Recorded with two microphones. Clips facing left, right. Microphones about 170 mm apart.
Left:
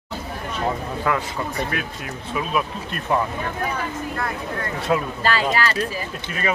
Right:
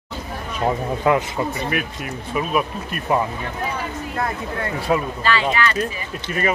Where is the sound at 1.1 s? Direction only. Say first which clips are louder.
Right 5 dB; 20° right (ahead or behind).